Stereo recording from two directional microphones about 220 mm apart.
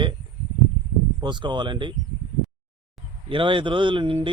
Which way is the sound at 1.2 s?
20° right (ahead or behind).